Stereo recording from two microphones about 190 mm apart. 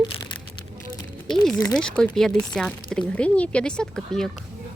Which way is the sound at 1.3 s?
5° left (ahead or behind).